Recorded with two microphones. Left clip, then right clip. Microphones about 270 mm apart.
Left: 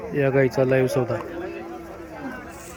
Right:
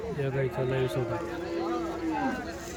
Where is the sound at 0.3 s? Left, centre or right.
Left.